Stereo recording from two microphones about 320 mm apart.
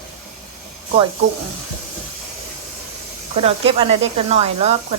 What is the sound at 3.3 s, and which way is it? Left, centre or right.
Speech, centre.